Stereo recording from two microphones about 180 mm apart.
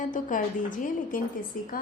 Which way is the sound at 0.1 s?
45° left (ahead or behind).